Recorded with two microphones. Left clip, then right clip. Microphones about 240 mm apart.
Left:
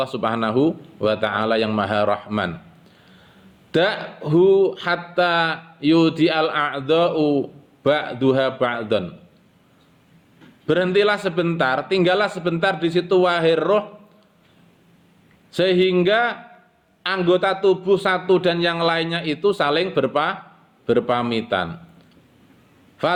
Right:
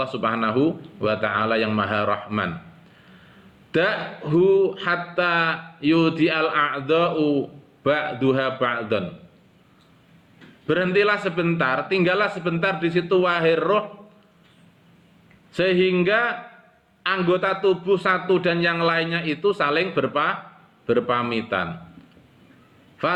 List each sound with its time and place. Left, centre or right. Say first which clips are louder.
0.0 s speech: left 1 dB; left
3.7 s speech: left 2 dB; left
10.7 s speech: left 2 dB; left
15.5 s speech: left 2 dB; left
23.0 s speech: left 2 dB; left